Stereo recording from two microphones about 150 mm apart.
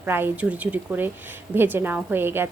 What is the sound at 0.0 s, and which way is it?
A woman's voice, 15° right (ahead or behind).